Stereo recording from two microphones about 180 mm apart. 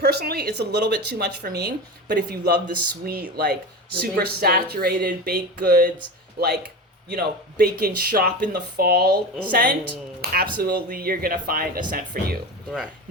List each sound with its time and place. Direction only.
0.0 s speech: 65° right (ahead or behind)
10.2 s speech: 55° right (ahead or behind)